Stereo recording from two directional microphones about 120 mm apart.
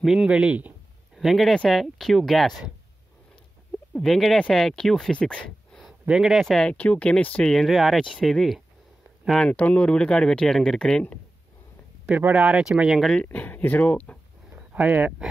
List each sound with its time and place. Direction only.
0.0 s speech: 5° right (ahead or behind)
3.9 s speech: centre (ahead or behind)
12.1 s speech: 10° right (ahead or behind); by 14.1 s 10° left (ahead or behind)
14.5 s a sound: 15° right (ahead or behind)